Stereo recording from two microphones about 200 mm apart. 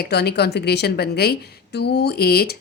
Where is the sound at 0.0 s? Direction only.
55° left (ahead or behind).